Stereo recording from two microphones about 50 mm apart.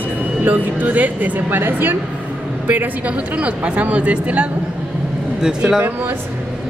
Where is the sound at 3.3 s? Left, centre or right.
Right.